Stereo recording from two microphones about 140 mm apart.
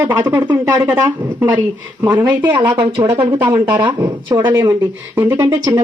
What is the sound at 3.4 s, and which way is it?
Speech, 30° right (ahead or behind).